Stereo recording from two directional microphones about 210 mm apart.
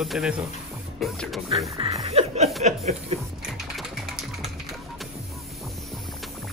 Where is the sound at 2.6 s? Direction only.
30° right (ahead or behind).